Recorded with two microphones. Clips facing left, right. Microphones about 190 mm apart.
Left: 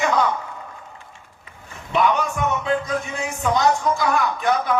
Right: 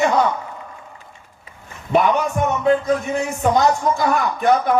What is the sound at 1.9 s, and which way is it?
A man's voice, 50° right (ahead or behind).